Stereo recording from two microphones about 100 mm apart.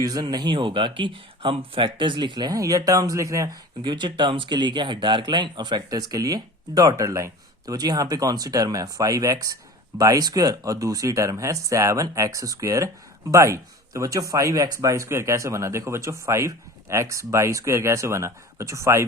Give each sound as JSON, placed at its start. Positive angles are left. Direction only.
{"t": 0.0, "sound": "speech", "side_deg": -40}
{"t": 3.8, "sound": "speech", "side_deg": -50}